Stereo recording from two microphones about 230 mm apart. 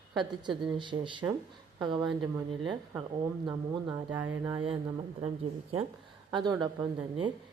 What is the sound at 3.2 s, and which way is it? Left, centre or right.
Speech, centre.